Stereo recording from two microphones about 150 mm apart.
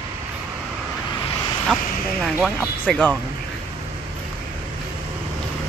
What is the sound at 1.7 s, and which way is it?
Speech, 5° left (ahead or behind).